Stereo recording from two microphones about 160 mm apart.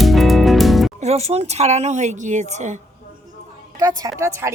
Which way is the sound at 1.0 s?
40° right (ahead or behind).